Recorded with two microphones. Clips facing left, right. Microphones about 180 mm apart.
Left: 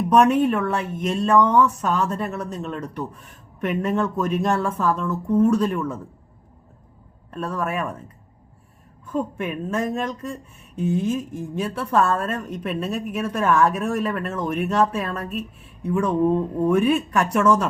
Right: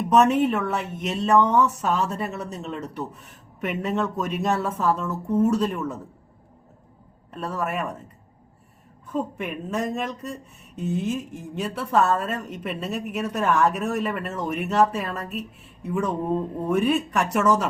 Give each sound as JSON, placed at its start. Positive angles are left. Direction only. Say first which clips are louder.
{"t": 0.2, "sound": "speech", "louder": "left 2 dB", "side_deg": -5}
{"t": 7.3, "sound": "speech", "louder": "left 2 dB", "side_deg": -5}
{"t": 9.1, "sound": "speech", "louder": "left 2 dB", "side_deg": 0}